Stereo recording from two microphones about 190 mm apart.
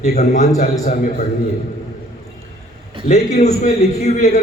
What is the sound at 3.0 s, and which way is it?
A man's voice, 35° left (ahead or behind).